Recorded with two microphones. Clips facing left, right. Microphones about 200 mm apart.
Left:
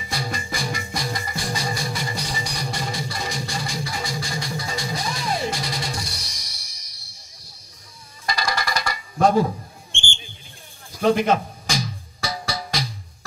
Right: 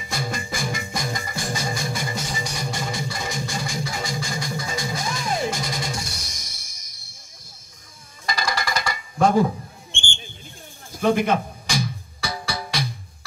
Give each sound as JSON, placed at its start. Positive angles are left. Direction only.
{"t": 0.1, "sound": "music", "side_deg": -50}
{"t": 8.3, "sound": "a sound", "side_deg": -50}
{"t": 10.9, "sound": "speech", "side_deg": -50}
{"t": 11.7, "sound": "music", "side_deg": -55}